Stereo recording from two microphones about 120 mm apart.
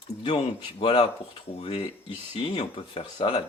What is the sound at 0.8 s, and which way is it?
Speech, 50° left (ahead or behind).